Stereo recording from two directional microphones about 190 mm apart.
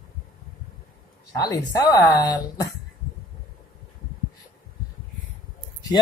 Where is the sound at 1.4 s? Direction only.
20° left (ahead or behind).